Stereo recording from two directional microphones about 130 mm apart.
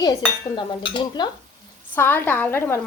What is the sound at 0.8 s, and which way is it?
Stir, 40° left (ahead or behind).